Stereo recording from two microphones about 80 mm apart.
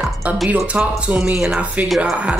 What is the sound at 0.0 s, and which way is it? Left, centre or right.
Music, centre.